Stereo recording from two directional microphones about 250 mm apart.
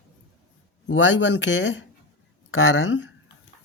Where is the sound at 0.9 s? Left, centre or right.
Left.